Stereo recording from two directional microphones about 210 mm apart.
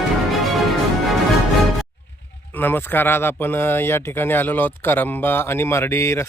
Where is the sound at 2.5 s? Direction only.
10° left (ahead or behind).